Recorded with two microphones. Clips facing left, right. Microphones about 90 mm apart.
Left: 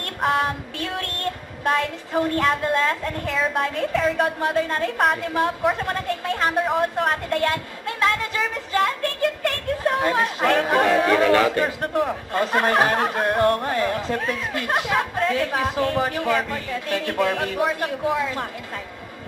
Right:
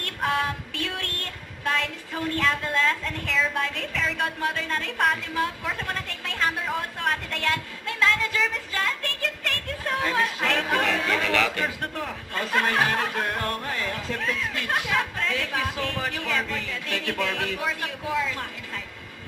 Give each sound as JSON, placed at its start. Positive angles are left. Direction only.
{"t": 0.2, "sound": "a sound", "side_deg": 40}
{"t": 2.1, "sound": "a woman's voice", "side_deg": 40}
{"t": 3.9, "sound": "speech", "side_deg": 40}
{"t": 6.9, "sound": "speech", "side_deg": 40}
{"t": 15.3, "sound": "speech", "side_deg": 45}